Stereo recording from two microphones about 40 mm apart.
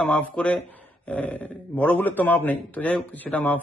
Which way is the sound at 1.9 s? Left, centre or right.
Left.